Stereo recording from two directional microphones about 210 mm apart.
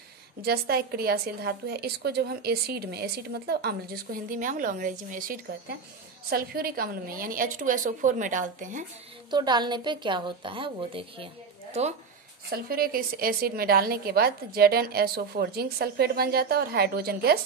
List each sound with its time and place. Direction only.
0.5 s a woman's voice: 45° right (ahead or behind)
9.3 s a woman's voice: 20° right (ahead or behind)
12.5 s a woman's voice: 45° right (ahead or behind)